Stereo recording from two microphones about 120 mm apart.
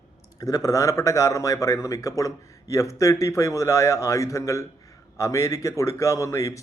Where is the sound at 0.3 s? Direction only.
30° left (ahead or behind).